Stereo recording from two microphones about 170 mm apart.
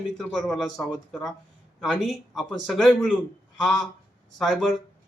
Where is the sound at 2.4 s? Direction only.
Centre (ahead or behind).